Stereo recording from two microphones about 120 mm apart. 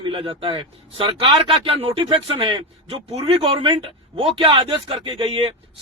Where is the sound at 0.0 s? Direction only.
45° right (ahead or behind).